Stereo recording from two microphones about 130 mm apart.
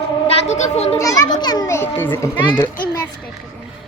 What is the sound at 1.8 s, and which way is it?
Speech, 15° left (ahead or behind).